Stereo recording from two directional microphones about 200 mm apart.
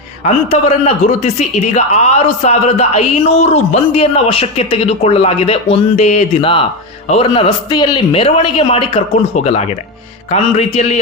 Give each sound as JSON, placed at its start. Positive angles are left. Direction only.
{"t": 0.3, "sound": "a man's voice", "side_deg": 35}